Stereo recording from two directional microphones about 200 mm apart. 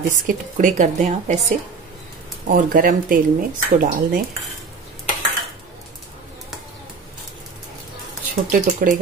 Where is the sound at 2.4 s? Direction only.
45° right (ahead or behind).